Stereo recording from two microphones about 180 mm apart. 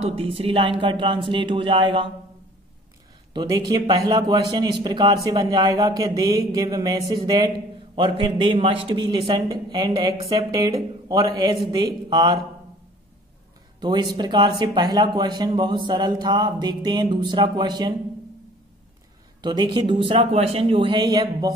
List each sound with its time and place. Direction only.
0.0 s a man's voice: 35° right (ahead or behind)
3.3 s a man's voice: 20° right (ahead or behind)
13.7 s a man's voice: 25° right (ahead or behind)
19.4 s a man's voice: 25° right (ahead or behind)